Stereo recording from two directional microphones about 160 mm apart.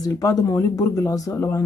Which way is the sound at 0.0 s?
20° left (ahead or behind).